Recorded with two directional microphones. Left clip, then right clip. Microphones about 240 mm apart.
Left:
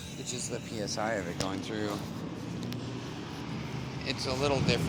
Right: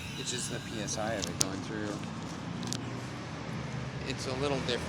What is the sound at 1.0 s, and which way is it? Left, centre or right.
Speech, centre.